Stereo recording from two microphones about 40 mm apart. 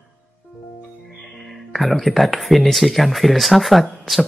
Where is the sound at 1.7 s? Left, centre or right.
Centre.